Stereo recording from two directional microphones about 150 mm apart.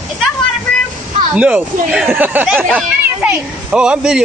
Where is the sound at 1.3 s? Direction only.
10° right (ahead or behind).